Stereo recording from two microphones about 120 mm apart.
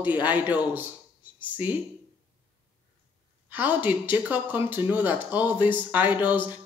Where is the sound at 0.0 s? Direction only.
15° right (ahead or behind).